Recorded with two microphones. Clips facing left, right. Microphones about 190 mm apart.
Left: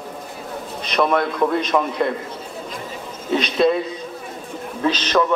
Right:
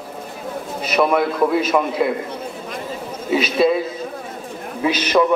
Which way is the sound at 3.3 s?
5° right (ahead or behind).